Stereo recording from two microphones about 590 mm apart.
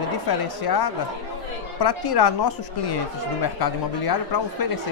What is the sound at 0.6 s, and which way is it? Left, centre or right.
A woman's voice, left.